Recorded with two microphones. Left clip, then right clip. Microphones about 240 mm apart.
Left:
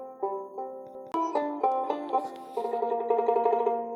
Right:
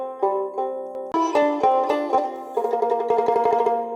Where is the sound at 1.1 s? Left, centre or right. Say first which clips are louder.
Right 9 dB; right.